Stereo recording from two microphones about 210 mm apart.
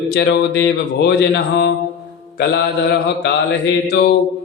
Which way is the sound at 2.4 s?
55° left (ahead or behind).